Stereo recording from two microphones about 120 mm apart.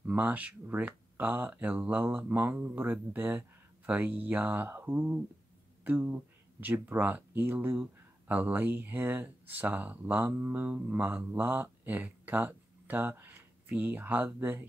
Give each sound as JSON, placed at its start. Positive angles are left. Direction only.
{"t": 0.0, "sound": "speech", "side_deg": -15}